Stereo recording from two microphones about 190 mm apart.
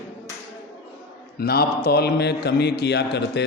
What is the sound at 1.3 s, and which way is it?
Speech, 55° left (ahead or behind).